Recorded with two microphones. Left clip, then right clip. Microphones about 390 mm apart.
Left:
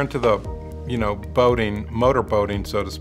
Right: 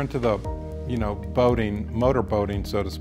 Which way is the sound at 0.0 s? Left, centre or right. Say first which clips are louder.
Left 5 dB; right.